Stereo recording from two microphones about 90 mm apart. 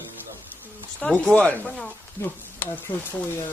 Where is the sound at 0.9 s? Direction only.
15° left (ahead or behind).